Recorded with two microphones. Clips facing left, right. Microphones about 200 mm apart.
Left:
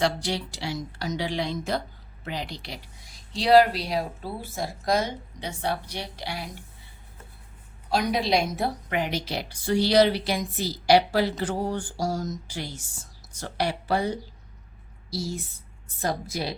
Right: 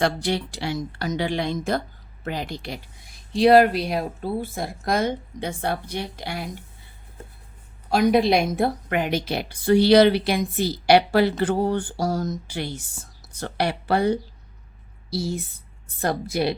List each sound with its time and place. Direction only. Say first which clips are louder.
0.0 s a woman's voice: right 3 dB; 55° right (ahead or behind)
7.9 s a woman's voice: right 6 dB; 55° right (ahead or behind)